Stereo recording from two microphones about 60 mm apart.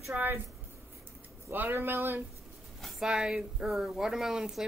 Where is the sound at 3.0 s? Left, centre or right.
Centre.